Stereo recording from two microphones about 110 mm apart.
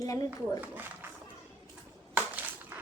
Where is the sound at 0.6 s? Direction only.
15° right (ahead or behind).